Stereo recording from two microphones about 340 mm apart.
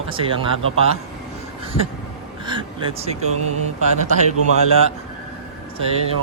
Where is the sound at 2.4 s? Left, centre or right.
Centre.